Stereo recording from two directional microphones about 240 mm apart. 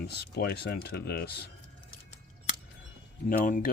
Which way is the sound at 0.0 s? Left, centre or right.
Left.